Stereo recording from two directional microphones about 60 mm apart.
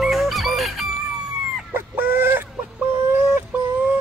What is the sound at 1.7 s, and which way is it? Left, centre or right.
Chicken, right.